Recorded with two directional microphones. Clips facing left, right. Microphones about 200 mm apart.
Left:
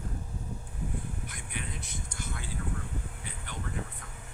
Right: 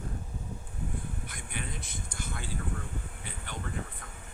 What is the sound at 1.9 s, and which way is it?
Vehicle, 55° right (ahead or behind).